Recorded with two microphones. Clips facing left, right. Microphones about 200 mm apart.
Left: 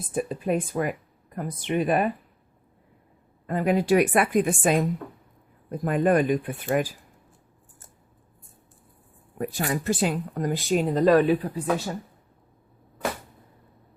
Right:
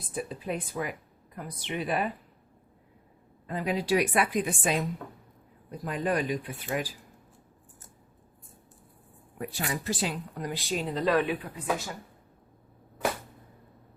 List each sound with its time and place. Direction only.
0.1 s speech: 50° left (ahead or behind)
3.4 s speech: 50° left (ahead or behind)
9.4 s speech: 45° left (ahead or behind)